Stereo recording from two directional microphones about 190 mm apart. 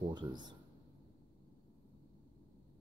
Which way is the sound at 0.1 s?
20° right (ahead or behind).